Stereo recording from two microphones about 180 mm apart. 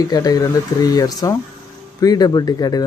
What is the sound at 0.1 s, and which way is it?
Speech, 20° left (ahead or behind).